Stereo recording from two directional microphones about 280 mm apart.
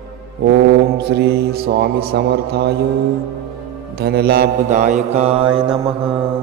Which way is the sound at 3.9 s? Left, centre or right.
Right.